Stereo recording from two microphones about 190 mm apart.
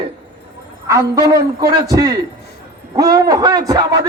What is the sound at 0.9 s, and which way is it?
A man's voice, 20° right (ahead or behind).